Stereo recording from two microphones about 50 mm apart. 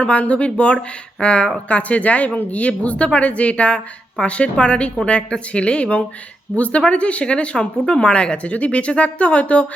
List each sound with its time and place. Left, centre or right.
0.0 s speech: left